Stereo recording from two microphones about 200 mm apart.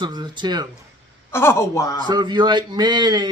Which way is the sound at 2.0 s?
20° right (ahead or behind).